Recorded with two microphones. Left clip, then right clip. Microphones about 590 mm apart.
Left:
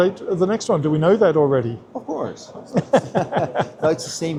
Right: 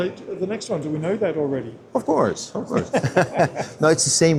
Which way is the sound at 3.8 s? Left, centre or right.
Right.